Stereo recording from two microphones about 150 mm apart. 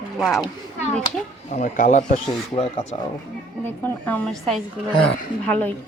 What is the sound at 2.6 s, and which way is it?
Speech, 40° left (ahead or behind).